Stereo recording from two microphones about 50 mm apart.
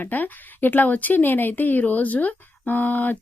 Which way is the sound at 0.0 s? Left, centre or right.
Left.